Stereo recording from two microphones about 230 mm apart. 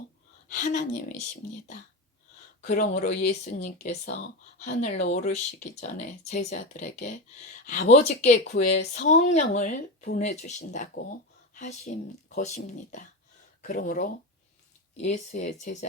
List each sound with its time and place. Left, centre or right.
0.4 s speech: left
2.6 s speech: left